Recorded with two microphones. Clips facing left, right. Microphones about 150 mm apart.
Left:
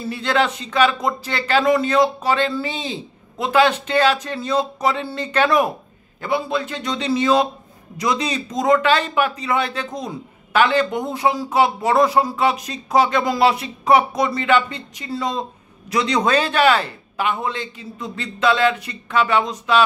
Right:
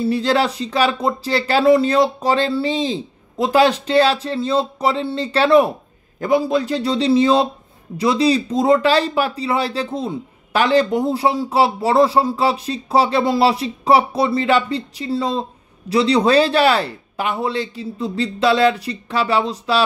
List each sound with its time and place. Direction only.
0.0 s speech: 35° right (ahead or behind)